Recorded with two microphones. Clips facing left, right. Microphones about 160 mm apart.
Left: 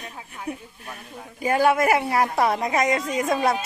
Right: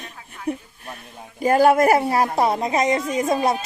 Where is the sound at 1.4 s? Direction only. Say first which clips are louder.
Right 4 dB; 40° right (ahead or behind).